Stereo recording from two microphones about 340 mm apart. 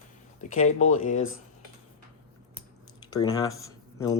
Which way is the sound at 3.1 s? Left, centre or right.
Centre.